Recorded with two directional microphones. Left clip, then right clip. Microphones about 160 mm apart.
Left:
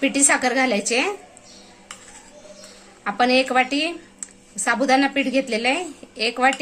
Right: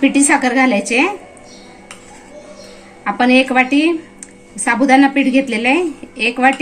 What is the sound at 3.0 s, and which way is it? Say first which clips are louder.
Speech: right 5 dB; 50° left (ahead or behind).